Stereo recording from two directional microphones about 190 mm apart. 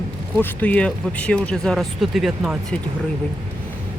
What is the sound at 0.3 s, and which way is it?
Speech, 10° left (ahead or behind).